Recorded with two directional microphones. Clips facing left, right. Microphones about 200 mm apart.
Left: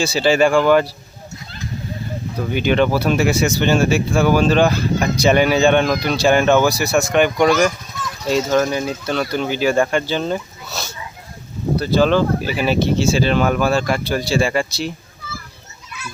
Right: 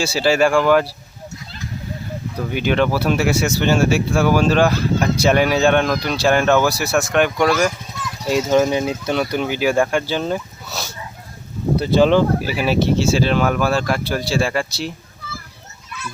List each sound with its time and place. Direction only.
0.0 s speech: 5° right (ahead or behind)
2.4 s speech: 5° right (ahead or behind)
12.4 s speech: 5° right (ahead or behind)